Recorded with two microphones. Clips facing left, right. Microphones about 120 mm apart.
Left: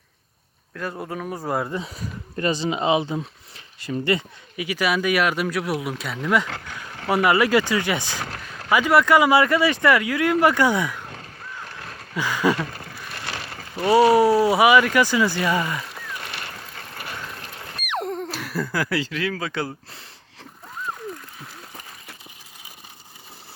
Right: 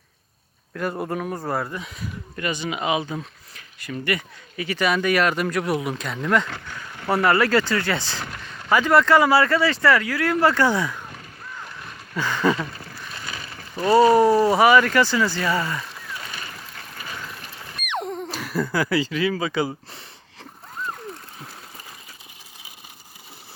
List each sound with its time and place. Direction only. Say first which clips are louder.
0.7 s speech: right 4 dB; 5° right (ahead or behind)
1.4 s speech: left 1 dB; 10° left (ahead or behind)
1.7 s speech: left 3 dB; 30° left (ahead or behind)
4.5 s speech: right 1 dB; 10° left (ahead or behind)
12.1 s speech: even; 10° left (ahead or behind)
13.1 s a sound: left 4 dB; 80° left
13.7 s speech: even; 10° left (ahead or behind)
16.2 s boat: left 1 dB; 65° left (ahead or behind)
17.8 s speech: left 1 dB; centre (ahead or behind)